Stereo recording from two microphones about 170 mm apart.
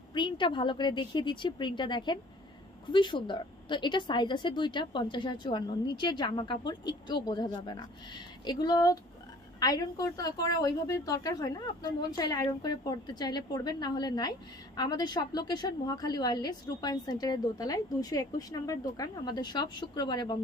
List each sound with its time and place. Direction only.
0.1 s a woman's voice: 30° left (ahead or behind)